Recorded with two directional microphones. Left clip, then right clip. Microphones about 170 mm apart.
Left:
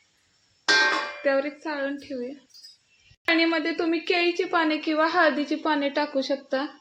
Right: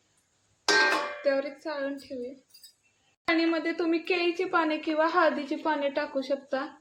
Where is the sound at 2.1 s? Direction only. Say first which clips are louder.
Left 4 dB; 45° left (ahead or behind).